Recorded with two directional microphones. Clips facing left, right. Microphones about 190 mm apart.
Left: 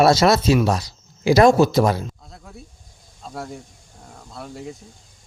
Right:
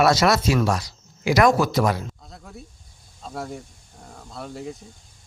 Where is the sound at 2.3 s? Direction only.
Centre (ahead or behind).